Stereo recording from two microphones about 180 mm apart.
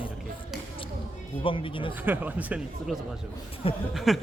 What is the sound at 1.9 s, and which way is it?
Speech, 10° right (ahead or behind).